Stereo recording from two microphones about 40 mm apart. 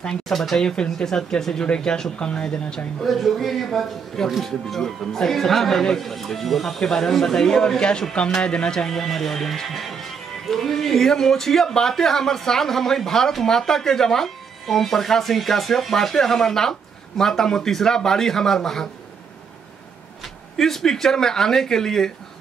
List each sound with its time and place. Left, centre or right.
0.3 s speech: centre
0.7 s speech: centre
3.0 s a man's voice: centre
20.5 s speech: centre